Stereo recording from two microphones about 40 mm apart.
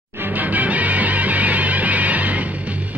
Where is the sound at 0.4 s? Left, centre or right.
Right.